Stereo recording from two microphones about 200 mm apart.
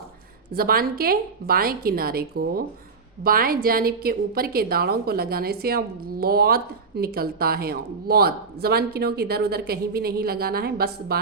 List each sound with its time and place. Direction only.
0.5 s a woman's voice: 50° right (ahead or behind)